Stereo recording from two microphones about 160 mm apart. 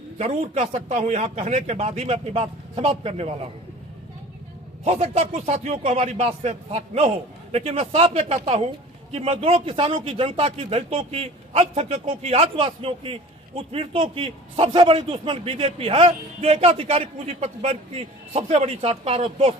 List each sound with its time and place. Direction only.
0.2 s a man's voice: 45° right (ahead or behind)
4.9 s a man's voice: 45° right (ahead or behind)